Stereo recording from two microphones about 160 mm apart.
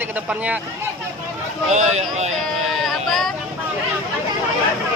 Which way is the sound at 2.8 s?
Centre (ahead or behind).